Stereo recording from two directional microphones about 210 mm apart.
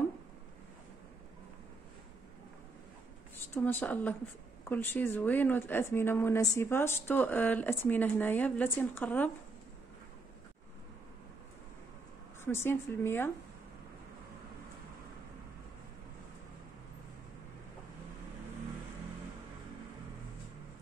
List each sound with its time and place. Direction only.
3.5 s speech: 10° left (ahead or behind)
12.4 s speech: 10° left (ahead or behind)